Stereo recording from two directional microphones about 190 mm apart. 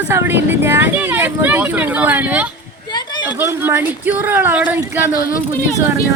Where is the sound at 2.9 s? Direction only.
25° left (ahead or behind).